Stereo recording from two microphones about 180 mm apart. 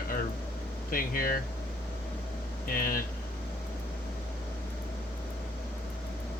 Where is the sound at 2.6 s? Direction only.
55° left (ahead or behind).